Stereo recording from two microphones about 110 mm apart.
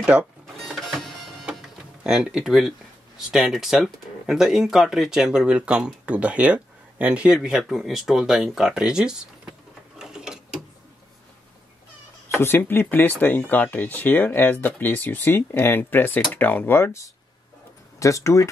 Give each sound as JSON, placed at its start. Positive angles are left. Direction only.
{"t": 0.0, "sound": "music", "side_deg": -10}
{"t": 2.0, "sound": "speech", "side_deg": -5}
{"t": 9.9, "sound": "mechanisms", "side_deg": -5}
{"t": 12.4, "sound": "speech", "side_deg": 20}